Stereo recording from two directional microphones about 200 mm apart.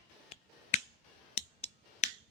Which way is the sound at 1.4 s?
30° left (ahead or behind).